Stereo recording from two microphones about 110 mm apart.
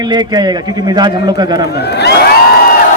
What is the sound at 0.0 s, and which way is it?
A man's voice, 40° right (ahead or behind).